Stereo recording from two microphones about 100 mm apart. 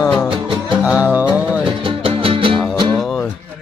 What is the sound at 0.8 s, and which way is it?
Speech, 10° right (ahead or behind).